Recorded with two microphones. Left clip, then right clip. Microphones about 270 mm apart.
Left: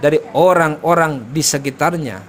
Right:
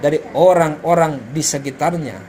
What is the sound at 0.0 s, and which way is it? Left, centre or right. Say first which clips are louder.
A man's voice: left 1 dB; left.